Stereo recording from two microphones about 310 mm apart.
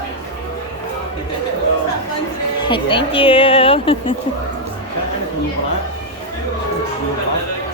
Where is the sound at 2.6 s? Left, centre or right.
Centre.